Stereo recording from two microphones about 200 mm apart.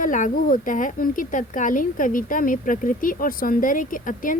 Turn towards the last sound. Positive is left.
turn(degrees=40)  # may be behind; listen again after turning